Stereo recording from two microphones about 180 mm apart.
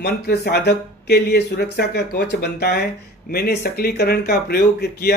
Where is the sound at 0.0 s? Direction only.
65° left (ahead or behind).